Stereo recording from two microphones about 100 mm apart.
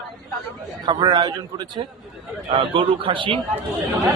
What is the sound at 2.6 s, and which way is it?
Speech, 60° right (ahead or behind).